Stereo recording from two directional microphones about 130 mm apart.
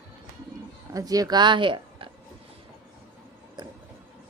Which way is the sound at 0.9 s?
30° right (ahead or behind).